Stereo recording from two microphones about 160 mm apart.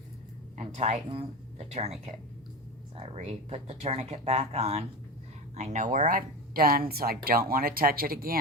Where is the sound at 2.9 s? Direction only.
40° right (ahead or behind).